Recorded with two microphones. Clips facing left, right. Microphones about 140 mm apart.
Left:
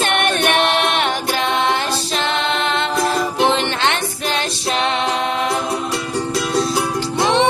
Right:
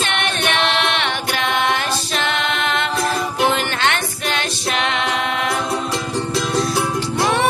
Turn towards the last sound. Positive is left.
turn(degrees=20)  # may be behind; listen again after turning